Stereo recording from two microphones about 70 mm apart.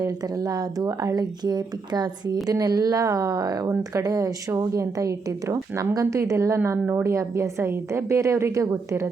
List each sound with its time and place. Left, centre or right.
0.4 s a woman's voice: right